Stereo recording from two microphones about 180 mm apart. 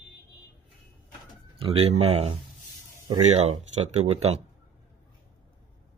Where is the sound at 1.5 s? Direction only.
30° right (ahead or behind).